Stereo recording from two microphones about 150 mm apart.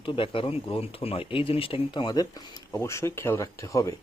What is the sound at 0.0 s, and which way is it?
Speech, 35° left (ahead or behind).